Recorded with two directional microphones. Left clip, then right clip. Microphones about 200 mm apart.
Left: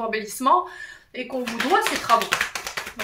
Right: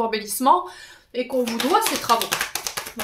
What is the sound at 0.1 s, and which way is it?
Speech, 50° right (ahead or behind).